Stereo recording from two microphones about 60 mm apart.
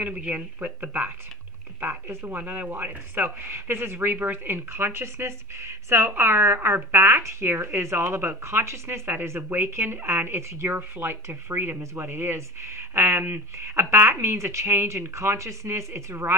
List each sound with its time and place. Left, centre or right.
0.0 s speech: right
9.0 s speech: right
11.8 s speech: right
12.1 s speech: right